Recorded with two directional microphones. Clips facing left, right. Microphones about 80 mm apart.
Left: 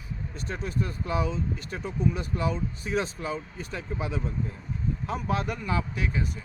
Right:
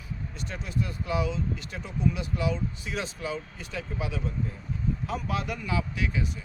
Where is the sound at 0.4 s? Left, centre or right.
Left.